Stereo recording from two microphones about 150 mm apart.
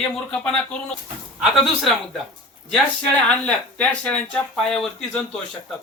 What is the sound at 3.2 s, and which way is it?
Speech, 5° left (ahead or behind).